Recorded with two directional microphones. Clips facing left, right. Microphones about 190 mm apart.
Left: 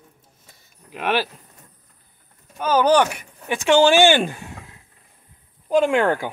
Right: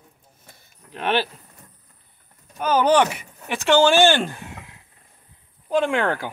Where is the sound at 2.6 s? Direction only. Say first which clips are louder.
Left 1 dB; centre (ahead or behind).